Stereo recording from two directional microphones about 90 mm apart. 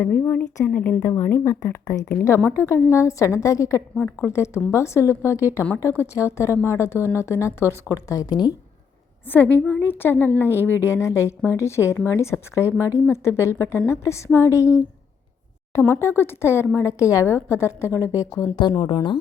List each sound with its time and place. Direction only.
0.0 s a woman's voice: 15° left (ahead or behind); by 3.8 s 35° left (ahead or behind)
3.9 s a woman's voice: 15° left (ahead or behind)
4.3 s a woman's voice: 30° left (ahead or behind)
9.2 s a woman's voice: 20° left (ahead or behind)
15.8 s a woman's voice: 25° left (ahead or behind)
18.9 s speech: 60° left (ahead or behind)